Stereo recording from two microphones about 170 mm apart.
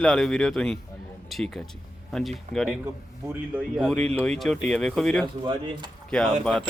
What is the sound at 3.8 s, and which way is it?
Speech, 5° left (ahead or behind).